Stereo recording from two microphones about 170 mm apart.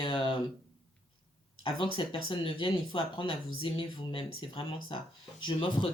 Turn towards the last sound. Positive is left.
turn(degrees=30)  # may be behind; listen again after turning